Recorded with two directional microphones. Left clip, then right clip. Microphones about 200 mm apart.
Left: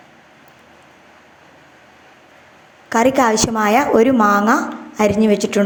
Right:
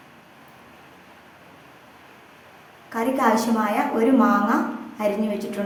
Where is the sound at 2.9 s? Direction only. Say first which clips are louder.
Left 7 dB; 40° left (ahead or behind).